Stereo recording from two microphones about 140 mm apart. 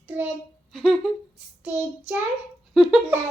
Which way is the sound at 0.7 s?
Centre (ahead or behind).